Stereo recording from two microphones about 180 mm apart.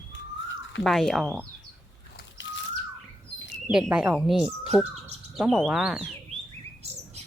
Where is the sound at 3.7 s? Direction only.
5° right (ahead or behind).